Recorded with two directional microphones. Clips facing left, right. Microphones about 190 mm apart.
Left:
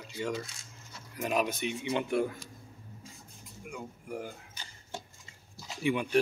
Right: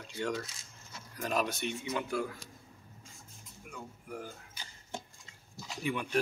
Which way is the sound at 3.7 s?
15° left (ahead or behind).